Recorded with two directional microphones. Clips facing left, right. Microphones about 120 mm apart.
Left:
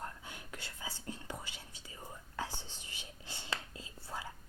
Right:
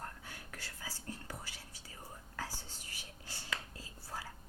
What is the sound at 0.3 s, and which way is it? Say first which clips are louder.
Whispering: left 2 dB; 20° left (ahead or behind).